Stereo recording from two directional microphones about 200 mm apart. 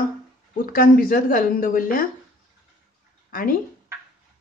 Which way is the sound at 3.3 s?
45° left (ahead or behind).